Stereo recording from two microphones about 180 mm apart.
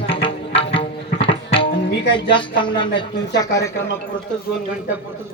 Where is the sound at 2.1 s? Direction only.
25° left (ahead or behind).